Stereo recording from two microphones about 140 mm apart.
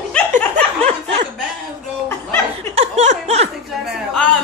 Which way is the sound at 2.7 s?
50° right (ahead or behind).